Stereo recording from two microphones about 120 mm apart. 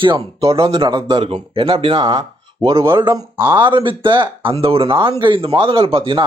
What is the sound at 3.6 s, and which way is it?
Speech, 45° right (ahead or behind).